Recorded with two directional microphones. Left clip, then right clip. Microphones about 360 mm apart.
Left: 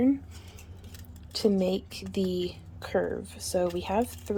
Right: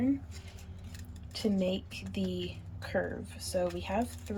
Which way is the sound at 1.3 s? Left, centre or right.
Centre.